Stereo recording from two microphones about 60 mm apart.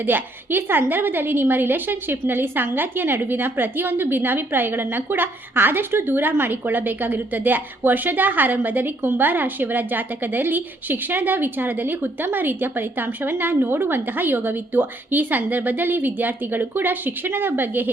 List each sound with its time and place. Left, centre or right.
0.0 s a woman's voice: right